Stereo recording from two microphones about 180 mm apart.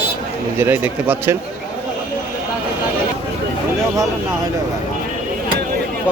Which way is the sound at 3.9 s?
20° right (ahead or behind).